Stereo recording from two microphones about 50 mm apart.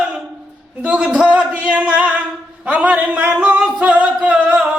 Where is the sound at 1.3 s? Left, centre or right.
Right.